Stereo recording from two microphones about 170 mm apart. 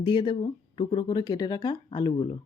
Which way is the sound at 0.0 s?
25° left (ahead or behind).